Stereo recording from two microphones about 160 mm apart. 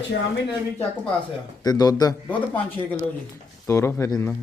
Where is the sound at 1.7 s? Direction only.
25° left (ahead or behind).